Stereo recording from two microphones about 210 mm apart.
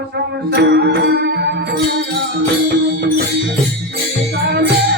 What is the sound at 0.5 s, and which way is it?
Music, 55° right (ahead or behind).